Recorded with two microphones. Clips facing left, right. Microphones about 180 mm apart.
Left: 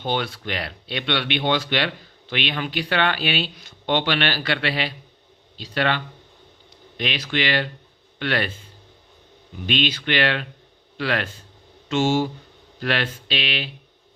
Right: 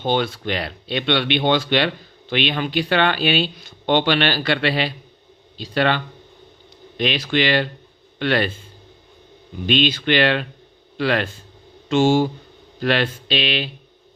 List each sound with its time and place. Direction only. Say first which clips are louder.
0.0 s speech: right 5 dB; 25° right (ahead or behind)
9.7 s a man's voice: right 5 dB; 35° right (ahead or behind)